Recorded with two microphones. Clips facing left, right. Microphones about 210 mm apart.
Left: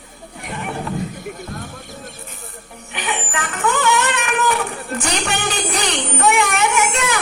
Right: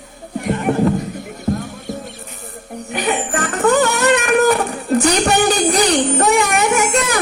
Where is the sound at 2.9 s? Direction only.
40° right (ahead or behind).